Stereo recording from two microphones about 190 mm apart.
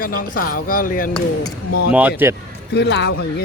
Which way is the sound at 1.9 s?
10° right (ahead or behind).